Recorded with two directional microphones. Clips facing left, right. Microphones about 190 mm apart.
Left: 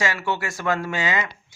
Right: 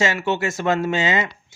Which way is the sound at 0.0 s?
25° right (ahead or behind).